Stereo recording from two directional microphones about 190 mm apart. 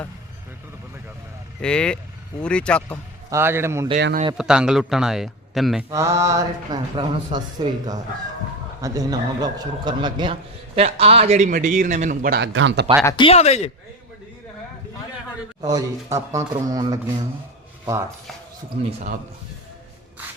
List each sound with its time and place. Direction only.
1.6 s a man's voice: 5° left (ahead or behind)
3.2 s a man's voice: 15° right (ahead or behind)
3.9 s speech: 60° right (ahead or behind)
4.4 s a man's voice: 5° right (ahead or behind)
5.9 s a man's voice: 15° right (ahead or behind); by 12.4 s 45° right (ahead or behind)
12.4 s speech: 70° right (ahead or behind)
13.1 s speech: 25° left (ahead or behind)
15.6 s speech: 15° right (ahead or behind)